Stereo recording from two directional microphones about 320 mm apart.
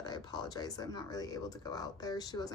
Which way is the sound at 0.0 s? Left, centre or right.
Centre.